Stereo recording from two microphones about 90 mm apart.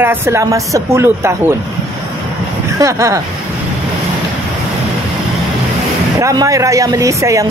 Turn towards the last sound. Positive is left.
turn(degrees=-35)  # may be behind; listen again after turning